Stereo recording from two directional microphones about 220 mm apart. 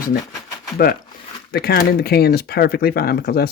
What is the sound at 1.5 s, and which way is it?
Speech, 45° left (ahead or behind).